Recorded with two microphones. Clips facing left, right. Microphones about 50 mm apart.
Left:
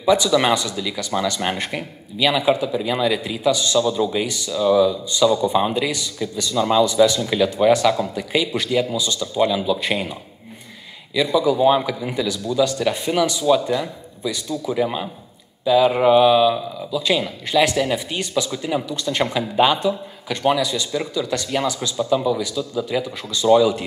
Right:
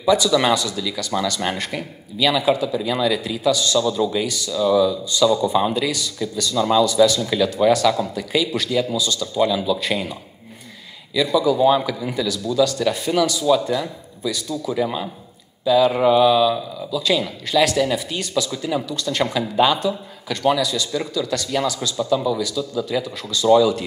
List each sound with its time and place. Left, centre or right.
0.0 s speech: left
11.1 s speech: left